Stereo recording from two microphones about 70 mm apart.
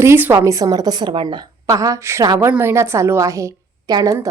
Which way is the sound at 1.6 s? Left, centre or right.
Right.